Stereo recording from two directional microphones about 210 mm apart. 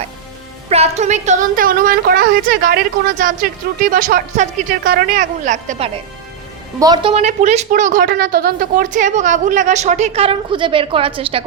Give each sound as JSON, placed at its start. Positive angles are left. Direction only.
{"t": 0.7, "sound": "a woman's voice", "side_deg": -30}
{"t": 6.7, "sound": "a woman's voice", "side_deg": -20}